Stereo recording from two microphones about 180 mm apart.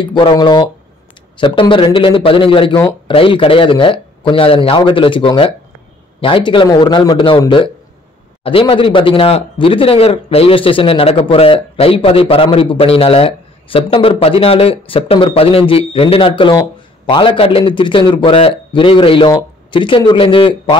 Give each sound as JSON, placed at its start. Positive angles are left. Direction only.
{"t": 0.0, "sound": "a man's voice", "side_deg": 25}